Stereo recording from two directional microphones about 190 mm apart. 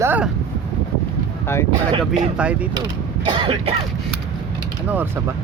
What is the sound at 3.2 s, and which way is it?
Speech, 25° right (ahead or behind).